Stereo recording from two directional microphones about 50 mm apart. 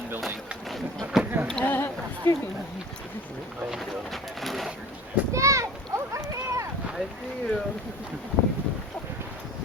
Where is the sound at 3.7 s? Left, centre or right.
Centre.